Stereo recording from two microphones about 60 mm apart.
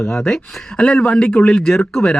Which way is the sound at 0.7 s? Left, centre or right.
Centre.